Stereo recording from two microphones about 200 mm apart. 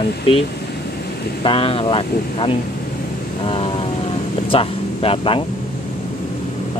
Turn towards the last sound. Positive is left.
turn(degrees=25)  # may be behind; listen again after turning